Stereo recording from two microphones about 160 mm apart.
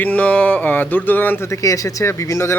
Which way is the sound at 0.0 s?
10° left (ahead or behind).